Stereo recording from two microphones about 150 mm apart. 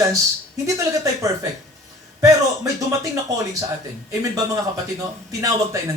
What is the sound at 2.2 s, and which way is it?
Speech, 20° right (ahead or behind).